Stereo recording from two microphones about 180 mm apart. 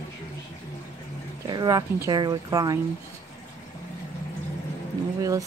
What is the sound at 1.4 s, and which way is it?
Speech, 20° right (ahead or behind).